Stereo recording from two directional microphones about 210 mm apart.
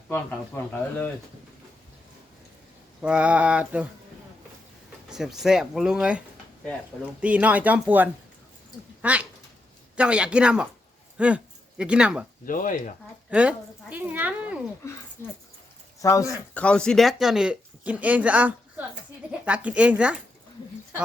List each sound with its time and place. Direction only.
0.1 s speech: 10° left (ahead or behind)
3.0 s speech: 5° right (ahead or behind)
5.0 s speech: centre (ahead or behind)
12.5 s speech: 40° left (ahead or behind)
13.3 s speech: 5° right (ahead or behind)
16.0 s speech: 15° left (ahead or behind)
16.6 s speech: 5° left (ahead or behind)